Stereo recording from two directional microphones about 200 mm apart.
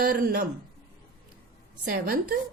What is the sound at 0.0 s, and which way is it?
Speech, 45° right (ahead or behind).